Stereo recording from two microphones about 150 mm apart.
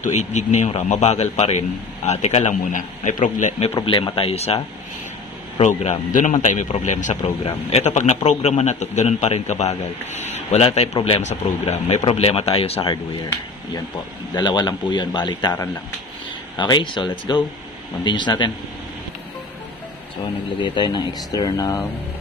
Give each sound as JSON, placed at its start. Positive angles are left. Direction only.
{"t": 0.0, "sound": "a man's voice", "side_deg": 50}
{"t": 5.6, "sound": "a man's voice", "side_deg": 45}
{"t": 14.3, "sound": "a man's voice", "side_deg": 30}
{"t": 20.6, "sound": "a man's voice", "side_deg": 30}